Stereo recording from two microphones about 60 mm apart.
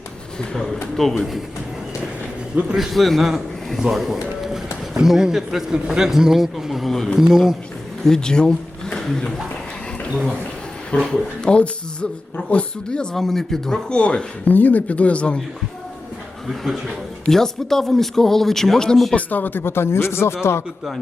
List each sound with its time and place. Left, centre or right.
0.3 s a man's voice: centre
2.7 s a man's voice: centre
7.2 s speech: centre
8.0 s speech: centre
11.1 s speech: centre
13.1 s speech: centre
14.0 s speech: centre
16.5 s a man's voice: centre
17.2 s a man's voice: centre
19.1 s speech: left